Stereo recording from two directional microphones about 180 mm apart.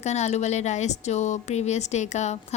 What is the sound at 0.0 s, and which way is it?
A woman's voice, 40° left (ahead or behind).